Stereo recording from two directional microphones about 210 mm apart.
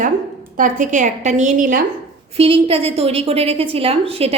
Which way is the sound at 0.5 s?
40° right (ahead or behind).